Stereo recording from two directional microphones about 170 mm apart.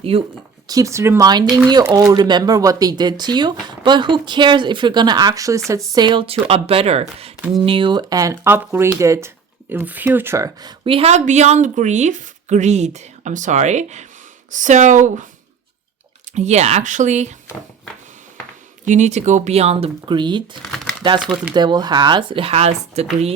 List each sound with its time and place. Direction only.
0.7 s speech: 20° right (ahead or behind); by 15.3 s 45° right (ahead or behind)
16.3 s speech: 40° right (ahead or behind)
18.9 s speech: 45° right (ahead or behind); by 20.6 s 25° right (ahead or behind)
21.2 s speech: 5° right (ahead or behind)
21.5 s speech: 25° right (ahead or behind)